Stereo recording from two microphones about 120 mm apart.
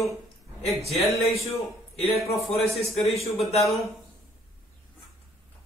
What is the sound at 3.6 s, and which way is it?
Speech, centre (ahead or behind).